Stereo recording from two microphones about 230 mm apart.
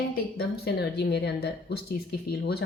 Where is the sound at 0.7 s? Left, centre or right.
Left.